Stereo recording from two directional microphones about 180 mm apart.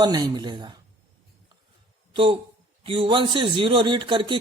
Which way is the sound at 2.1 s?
30° right (ahead or behind).